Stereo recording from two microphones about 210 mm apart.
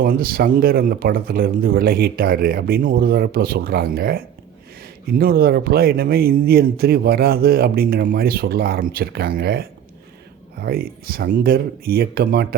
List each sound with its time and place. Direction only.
0.0 s speech: 45° right (ahead or behind)